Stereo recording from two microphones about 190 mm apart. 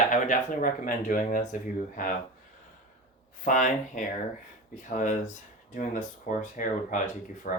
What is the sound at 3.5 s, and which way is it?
Speech, 40° left (ahead or behind).